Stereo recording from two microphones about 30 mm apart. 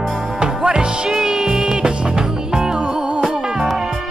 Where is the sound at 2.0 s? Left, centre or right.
Right.